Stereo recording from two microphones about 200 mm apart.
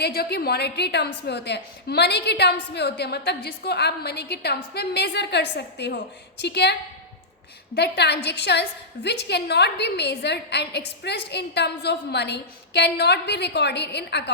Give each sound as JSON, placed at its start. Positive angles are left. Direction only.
{"t": 0.0, "sound": "a woman's voice", "side_deg": 55}
{"t": 7.8, "sound": "a woman's voice", "side_deg": 55}